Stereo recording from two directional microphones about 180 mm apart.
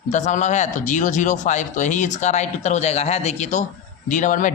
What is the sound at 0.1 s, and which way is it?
Speech, 40° left (ahead or behind).